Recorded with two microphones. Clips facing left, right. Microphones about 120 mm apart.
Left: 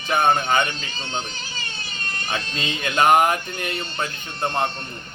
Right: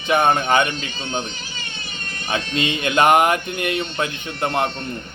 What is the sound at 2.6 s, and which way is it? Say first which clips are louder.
Speech: right 3 dB; 65° right (ahead or behind).